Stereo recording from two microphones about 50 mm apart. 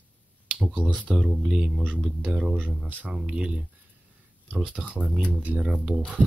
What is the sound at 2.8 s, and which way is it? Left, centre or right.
Speech, right.